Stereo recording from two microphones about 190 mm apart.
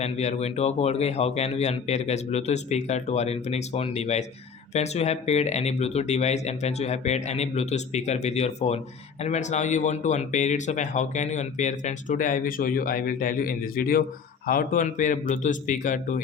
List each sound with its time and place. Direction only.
0.0 s a man's voice: 35° left (ahead or behind)